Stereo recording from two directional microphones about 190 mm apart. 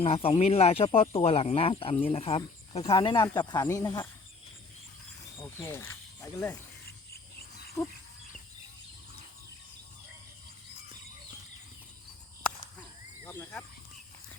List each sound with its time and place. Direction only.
0.0 s speech: 30° left (ahead or behind)
5.4 s speech: 15° left (ahead or behind)
7.8 s goat: 15° left (ahead or behind)
13.2 s a sound: 10° left (ahead or behind)